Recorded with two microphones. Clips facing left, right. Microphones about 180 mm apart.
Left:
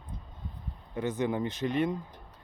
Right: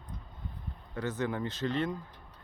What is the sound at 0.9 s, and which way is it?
Speech, 15° left (ahead or behind).